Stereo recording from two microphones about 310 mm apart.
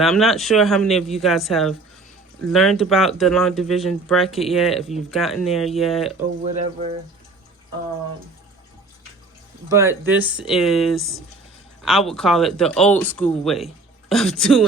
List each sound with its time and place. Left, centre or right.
0.0 s speech: centre
6.4 s speech: centre
9.6 s speech: centre